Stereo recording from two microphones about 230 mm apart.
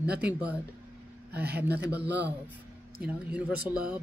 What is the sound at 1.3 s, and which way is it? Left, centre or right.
Speech, right.